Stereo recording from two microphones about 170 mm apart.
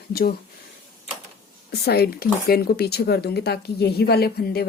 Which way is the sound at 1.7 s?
65° left (ahead or behind).